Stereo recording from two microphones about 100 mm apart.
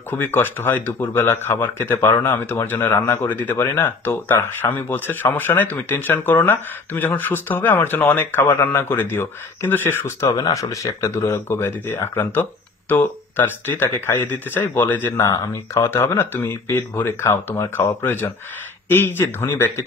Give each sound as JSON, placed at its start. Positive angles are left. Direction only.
{"t": 0.1, "sound": "speech", "side_deg": 20}
{"t": 10.2, "sound": "speech", "side_deg": 35}